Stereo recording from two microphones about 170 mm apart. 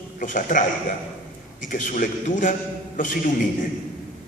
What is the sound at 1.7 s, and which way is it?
Speech, 50° left (ahead or behind).